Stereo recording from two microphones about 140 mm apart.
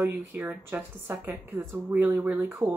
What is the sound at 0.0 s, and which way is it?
A woman's voice, 10° right (ahead or behind).